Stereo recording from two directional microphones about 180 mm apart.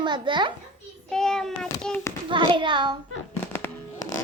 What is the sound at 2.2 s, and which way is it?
Speech, 25° right (ahead or behind).